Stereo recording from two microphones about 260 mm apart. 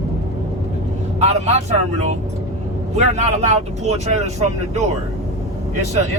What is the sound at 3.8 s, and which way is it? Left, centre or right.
Speech, right.